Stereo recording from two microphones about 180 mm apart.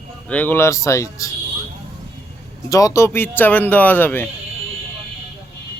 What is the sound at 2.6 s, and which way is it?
Speech, 20° left (ahead or behind).